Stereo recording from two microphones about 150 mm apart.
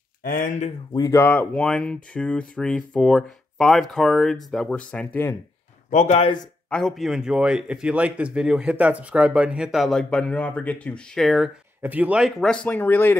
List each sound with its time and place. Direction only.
0.2 s speech: 65° left (ahead or behind)
0.9 s a man's voice: 20° left (ahead or behind)
5.9 s speech: 55° left (ahead or behind)
6.7 s a man's voice: centre (ahead or behind)
11.8 s a man's voice: 10° right (ahead or behind); by 13.2 s 15° left (ahead or behind)